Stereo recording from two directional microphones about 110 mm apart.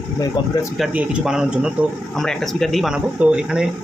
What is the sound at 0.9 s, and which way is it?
Speech, 10° right (ahead or behind).